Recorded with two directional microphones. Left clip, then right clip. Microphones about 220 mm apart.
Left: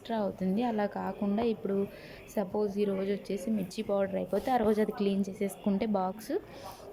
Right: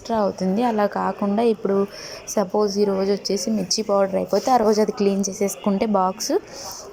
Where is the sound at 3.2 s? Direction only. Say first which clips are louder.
Right 12 dB; 35° right (ahead or behind).